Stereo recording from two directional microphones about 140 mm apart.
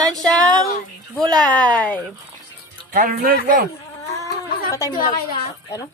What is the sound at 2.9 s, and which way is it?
Speech, 90° right.